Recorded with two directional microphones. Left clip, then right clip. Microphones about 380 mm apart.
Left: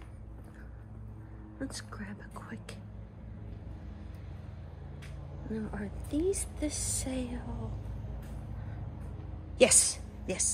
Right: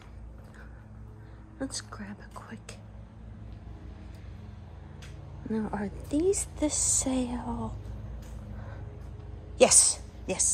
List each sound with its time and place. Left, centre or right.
1.6 s a woman's voice: centre
5.5 s a woman's voice: centre
9.6 s a woman's voice: centre